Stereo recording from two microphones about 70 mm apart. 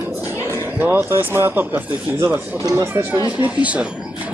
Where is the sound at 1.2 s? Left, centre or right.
Right.